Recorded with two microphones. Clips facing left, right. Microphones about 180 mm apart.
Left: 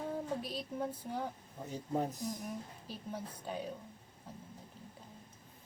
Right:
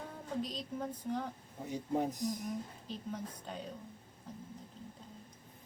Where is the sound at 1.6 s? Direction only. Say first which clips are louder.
Right 2 dB; 10° right (ahead or behind).